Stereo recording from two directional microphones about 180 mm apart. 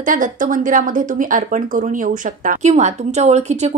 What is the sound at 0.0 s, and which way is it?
Speech, 45° right (ahead or behind).